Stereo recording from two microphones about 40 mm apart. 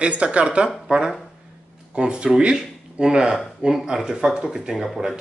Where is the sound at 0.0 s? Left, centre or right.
Right.